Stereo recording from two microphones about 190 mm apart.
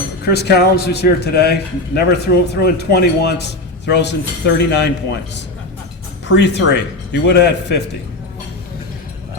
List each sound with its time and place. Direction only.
0.3 s a man's voice: 60° left (ahead or behind)
6.2 s speech: 70° left (ahead or behind)